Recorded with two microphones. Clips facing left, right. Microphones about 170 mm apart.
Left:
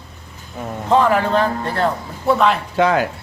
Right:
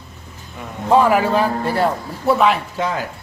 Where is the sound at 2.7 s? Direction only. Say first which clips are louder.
Left 6 dB; 70° left (ahead or behind).